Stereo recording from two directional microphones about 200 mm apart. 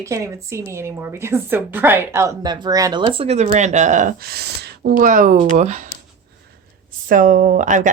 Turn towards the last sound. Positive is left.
turn(degrees=-40)  # may be behind; listen again after turning